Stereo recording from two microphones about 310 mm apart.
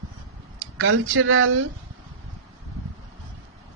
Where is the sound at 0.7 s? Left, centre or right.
Right.